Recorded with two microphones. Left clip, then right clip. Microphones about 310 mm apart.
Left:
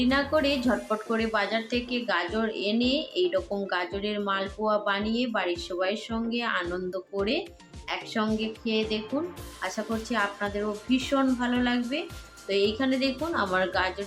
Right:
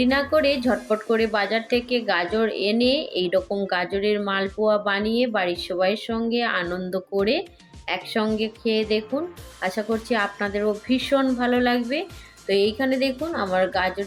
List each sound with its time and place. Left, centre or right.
0.0 s speech: centre